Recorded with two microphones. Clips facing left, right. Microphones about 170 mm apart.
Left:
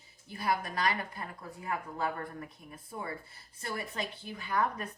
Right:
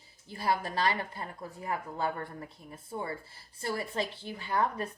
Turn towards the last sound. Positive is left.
turn(degrees=-30)  # may be behind; listen again after turning